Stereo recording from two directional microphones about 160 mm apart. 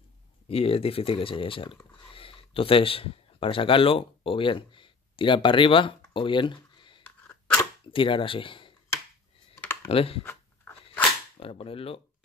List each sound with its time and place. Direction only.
0.5 s speech: 35° left (ahead or behind)
7.9 s a sound: 30° left (ahead or behind)
9.8 s speech: 35° left (ahead or behind)
10.2 s dog: 15° left (ahead or behind)
11.3 s speech: 35° left (ahead or behind)